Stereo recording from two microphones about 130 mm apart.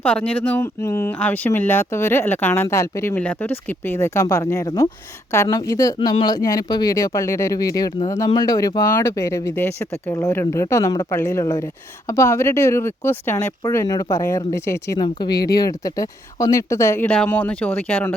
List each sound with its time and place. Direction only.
0.0 s speech: 10° left (ahead or behind)
14.9 s speech: 35° left (ahead or behind); by 18.1 s 15° left (ahead or behind)